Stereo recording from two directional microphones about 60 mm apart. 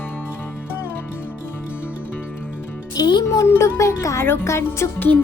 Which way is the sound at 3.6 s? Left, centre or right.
Left.